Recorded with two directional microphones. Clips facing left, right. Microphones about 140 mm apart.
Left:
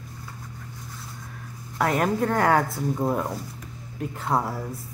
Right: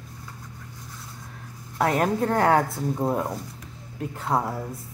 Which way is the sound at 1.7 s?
25° right (ahead or behind).